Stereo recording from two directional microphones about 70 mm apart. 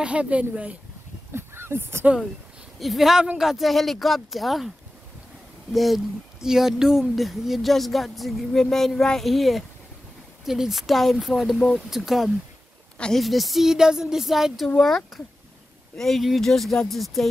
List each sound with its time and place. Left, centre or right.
0.0 s speech: centre
1.3 s speech: right
2.8 s speech: centre
5.7 s speech: centre